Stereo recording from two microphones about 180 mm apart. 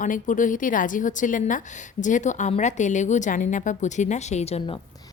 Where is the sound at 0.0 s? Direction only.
45° left (ahead or behind).